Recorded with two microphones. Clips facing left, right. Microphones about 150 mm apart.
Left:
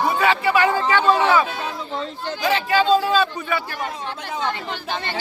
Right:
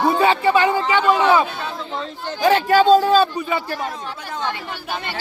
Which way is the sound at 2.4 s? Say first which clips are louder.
Right 5 dB; 50° right (ahead or behind).